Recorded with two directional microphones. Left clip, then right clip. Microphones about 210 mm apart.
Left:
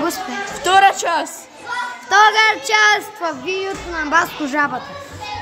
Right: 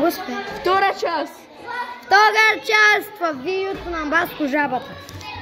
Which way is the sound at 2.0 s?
Centre (ahead or behind).